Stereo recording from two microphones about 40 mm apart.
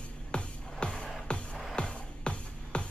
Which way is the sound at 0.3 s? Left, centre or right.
Left.